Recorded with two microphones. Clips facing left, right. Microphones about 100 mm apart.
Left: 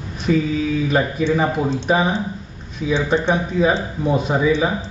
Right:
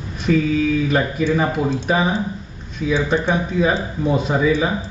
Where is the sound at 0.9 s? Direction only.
10° left (ahead or behind).